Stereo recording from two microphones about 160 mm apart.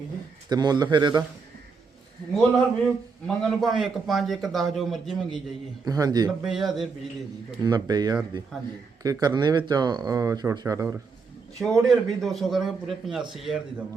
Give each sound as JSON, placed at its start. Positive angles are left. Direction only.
{"t": 0.5, "sound": "speech", "side_deg": -25}
{"t": 2.8, "sound": "a man's voice", "side_deg": 0}
{"t": 5.8, "sound": "speech", "side_deg": -20}
{"t": 6.4, "sound": "a man's voice", "side_deg": 0}
{"t": 7.6, "sound": "speech", "side_deg": -25}
{"t": 11.6, "sound": "a man's voice", "side_deg": 0}